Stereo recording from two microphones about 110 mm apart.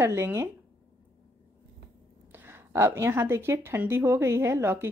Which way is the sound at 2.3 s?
20° right (ahead or behind).